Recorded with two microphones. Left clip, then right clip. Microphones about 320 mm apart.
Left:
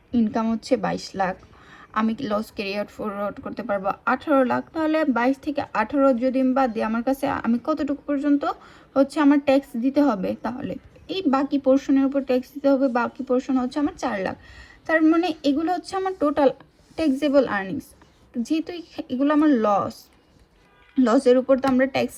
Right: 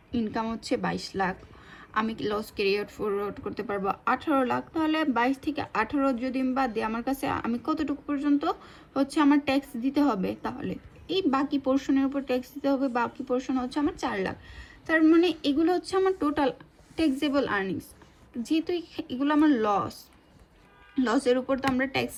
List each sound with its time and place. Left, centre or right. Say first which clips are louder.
0.1 s a woman's voice: left 6 dB; centre